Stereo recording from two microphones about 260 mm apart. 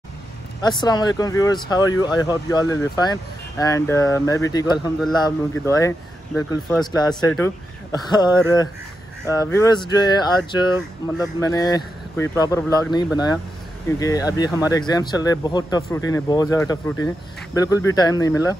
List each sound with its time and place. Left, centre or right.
0.6 s speech: centre
8.3 s speech: centre
9.3 s speech: centre
10.7 s speech: centre
11.4 s speech: centre
13.8 s speech: centre